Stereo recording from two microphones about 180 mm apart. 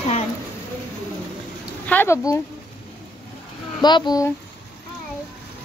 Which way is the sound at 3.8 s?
25° left (ahead or behind).